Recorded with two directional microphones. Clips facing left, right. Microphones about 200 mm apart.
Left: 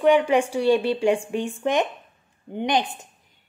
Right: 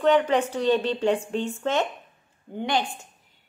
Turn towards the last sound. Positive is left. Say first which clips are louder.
# left 3 dB
turn(degrees=20)  # may be behind; listen again after turning